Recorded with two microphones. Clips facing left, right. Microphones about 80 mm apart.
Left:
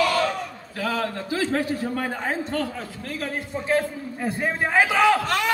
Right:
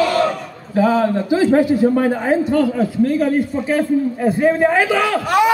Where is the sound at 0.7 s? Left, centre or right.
Right; by 5.2 s centre.